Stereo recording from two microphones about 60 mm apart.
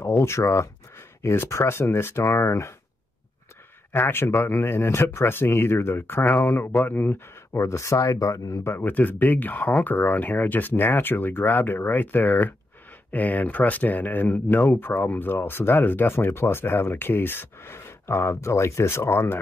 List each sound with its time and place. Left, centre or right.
0.0 s speech: left
3.9 s speech: left
7.5 s speech: left
8.6 s speech: left